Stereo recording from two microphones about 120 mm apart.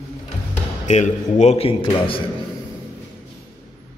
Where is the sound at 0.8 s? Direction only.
75° left (ahead or behind); by 2.2 s 45° left (ahead or behind).